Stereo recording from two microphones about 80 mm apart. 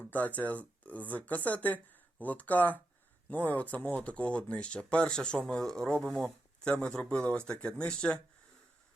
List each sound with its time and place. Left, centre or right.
0.0 s speech: centre